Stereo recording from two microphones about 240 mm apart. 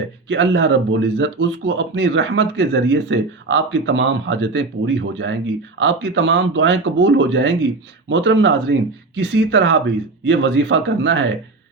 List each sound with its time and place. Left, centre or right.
0.3 s speech: right